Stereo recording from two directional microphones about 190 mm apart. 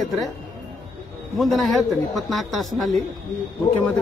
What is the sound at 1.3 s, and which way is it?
A man's voice, centre (ahead or behind).